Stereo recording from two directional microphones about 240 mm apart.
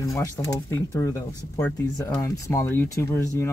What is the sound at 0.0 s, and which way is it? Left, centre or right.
Speech, centre.